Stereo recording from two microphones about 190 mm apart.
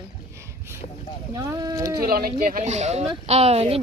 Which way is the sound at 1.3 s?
20° right (ahead or behind).